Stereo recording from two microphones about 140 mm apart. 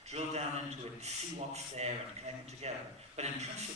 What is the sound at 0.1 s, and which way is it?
A man's voice, 50° right (ahead or behind).